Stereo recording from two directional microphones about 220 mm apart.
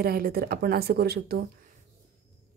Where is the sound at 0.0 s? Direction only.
45° right (ahead or behind).